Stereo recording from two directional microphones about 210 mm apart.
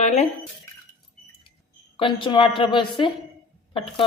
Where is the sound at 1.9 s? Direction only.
25° left (ahead or behind).